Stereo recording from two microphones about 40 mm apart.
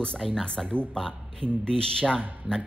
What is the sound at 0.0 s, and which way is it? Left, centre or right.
Speech, centre.